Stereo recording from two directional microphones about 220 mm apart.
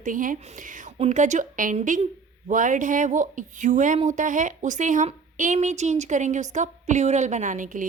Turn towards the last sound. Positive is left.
turn(degrees=-35)  # may be behind; listen again after turning